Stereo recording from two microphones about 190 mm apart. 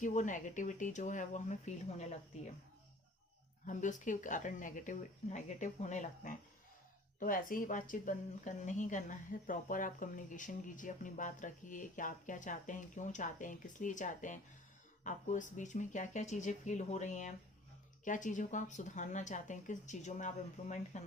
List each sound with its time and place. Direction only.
0.0 s speech: 40° left (ahead or behind)
3.7 s a woman's voice: 40° left (ahead or behind)